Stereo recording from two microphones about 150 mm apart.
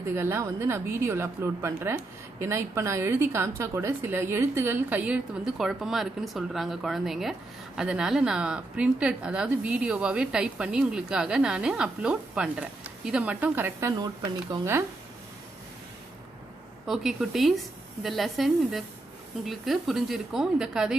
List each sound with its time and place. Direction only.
0.1 s a woman's voice: 15° right (ahead or behind)
16.8 s a woman's voice: centre (ahead or behind)